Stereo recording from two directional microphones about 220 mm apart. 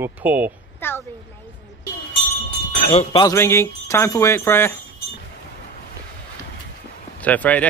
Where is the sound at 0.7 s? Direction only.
10° left (ahead or behind).